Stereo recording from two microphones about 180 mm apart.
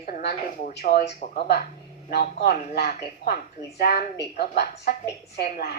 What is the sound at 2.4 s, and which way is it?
A woman's voice, 60° left (ahead or behind).